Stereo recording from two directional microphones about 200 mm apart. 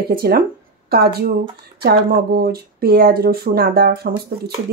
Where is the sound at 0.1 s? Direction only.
50° right (ahead or behind).